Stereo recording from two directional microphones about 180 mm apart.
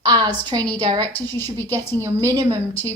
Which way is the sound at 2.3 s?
20° right (ahead or behind).